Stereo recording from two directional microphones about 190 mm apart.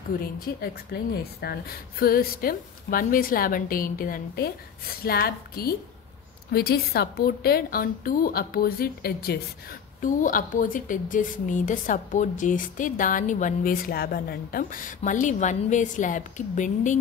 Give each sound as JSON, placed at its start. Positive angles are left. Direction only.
{"t": 0.2, "sound": "a woman's voice", "side_deg": 50}